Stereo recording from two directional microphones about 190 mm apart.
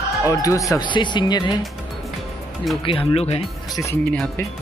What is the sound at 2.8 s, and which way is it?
Speech, 30° left (ahead or behind).